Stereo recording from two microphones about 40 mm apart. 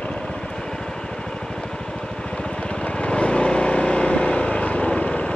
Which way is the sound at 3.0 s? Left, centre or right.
Left.